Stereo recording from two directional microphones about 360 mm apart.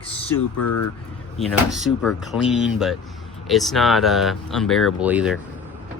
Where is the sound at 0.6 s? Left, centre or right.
Left.